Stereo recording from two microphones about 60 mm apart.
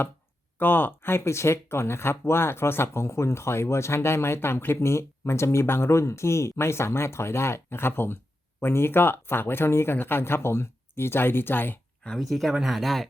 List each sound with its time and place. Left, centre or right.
0.6 s speech: left
12.1 s speech: centre